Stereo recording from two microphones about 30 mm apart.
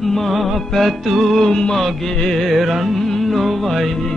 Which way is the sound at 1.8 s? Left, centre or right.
Centre.